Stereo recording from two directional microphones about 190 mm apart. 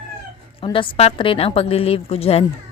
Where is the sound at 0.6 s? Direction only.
30° left (ahead or behind).